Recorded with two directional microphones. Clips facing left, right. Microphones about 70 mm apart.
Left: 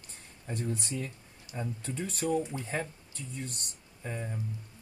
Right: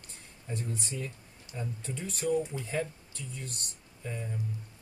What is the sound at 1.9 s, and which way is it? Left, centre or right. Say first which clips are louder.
Speech: right 1 dB; left.